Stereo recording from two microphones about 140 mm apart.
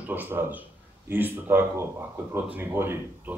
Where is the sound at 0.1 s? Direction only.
15° right (ahead or behind).